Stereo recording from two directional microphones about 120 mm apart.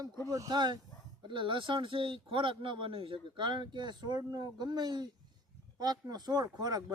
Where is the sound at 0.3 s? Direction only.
30° right (ahead or behind).